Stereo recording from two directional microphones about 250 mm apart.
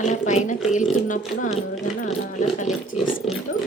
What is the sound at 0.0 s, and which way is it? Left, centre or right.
Speech, left.